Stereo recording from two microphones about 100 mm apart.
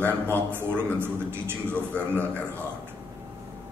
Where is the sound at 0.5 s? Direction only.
20° right (ahead or behind).